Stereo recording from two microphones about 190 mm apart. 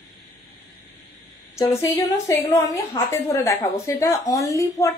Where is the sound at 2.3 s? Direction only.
15° left (ahead or behind).